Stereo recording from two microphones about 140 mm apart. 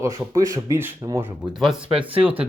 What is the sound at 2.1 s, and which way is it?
Speech, 40° right (ahead or behind).